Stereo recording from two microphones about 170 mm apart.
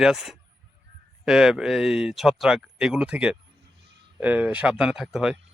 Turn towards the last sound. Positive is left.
turn(degrees=-5)  # may be behind; listen again after turning